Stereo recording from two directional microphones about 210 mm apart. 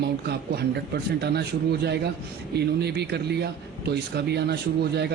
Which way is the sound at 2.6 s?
50° right (ahead or behind).